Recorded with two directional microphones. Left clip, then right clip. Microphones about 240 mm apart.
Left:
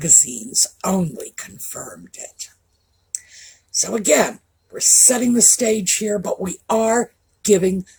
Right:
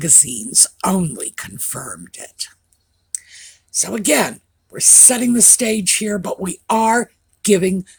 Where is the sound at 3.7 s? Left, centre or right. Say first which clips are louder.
Left 1 dB; right.